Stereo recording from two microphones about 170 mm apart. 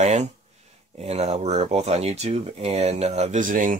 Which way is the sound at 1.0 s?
40° right (ahead or behind).